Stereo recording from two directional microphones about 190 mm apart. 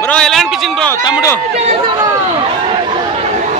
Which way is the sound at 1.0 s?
15° left (ahead or behind).